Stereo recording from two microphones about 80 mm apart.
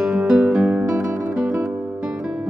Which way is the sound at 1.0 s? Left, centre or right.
Right.